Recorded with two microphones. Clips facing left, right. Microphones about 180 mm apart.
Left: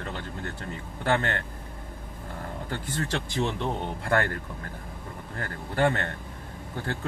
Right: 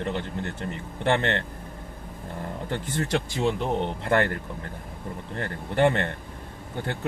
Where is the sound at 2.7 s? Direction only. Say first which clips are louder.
Right 4 dB; 20° right (ahead or behind).